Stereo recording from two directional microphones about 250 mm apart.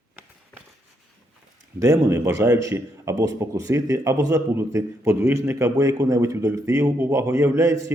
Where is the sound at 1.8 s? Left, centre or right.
Centre.